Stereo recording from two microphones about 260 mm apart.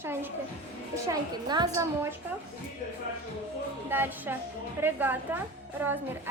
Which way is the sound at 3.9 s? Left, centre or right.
Centre.